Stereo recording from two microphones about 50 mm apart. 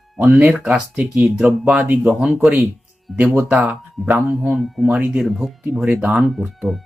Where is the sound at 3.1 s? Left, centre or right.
Centre.